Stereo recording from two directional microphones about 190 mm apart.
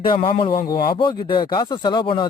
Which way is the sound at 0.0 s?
25° left (ahead or behind).